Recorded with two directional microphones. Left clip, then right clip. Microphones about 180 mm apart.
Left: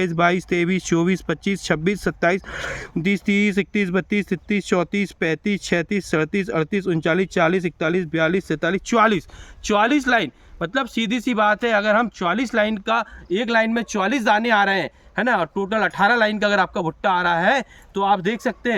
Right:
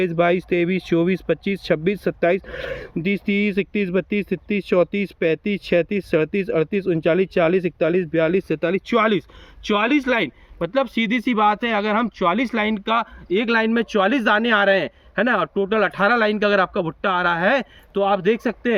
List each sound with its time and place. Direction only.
0.0 s speech: 50° left (ahead or behind)
9.6 s speech: 30° left (ahead or behind)